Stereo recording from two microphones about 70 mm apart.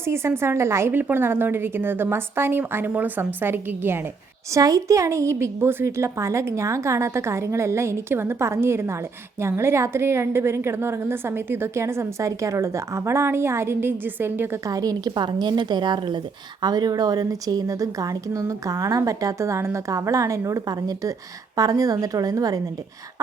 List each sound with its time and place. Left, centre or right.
0.0 s a woman's voice: right
0.9 s a woman's voice: right
4.5 s a woman's voice: right
14.7 s a woman's voice: right